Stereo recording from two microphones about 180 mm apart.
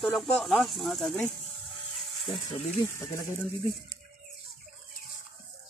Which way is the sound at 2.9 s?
15° left (ahead or behind).